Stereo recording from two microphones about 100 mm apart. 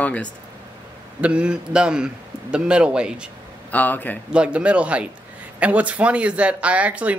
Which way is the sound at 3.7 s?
15° left (ahead or behind).